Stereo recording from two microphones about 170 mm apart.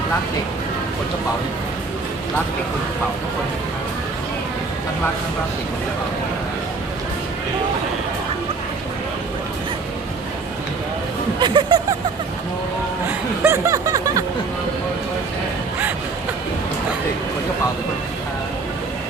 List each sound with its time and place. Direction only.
11.3 s speech: 30° right (ahead or behind)
13.1 s speech: 15° right (ahead or behind)